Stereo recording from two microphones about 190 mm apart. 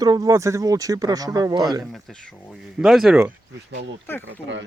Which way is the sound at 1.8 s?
Centre (ahead or behind).